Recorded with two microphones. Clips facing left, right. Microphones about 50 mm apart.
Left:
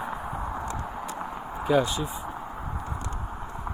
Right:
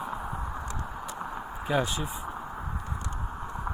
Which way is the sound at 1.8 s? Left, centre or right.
Centre.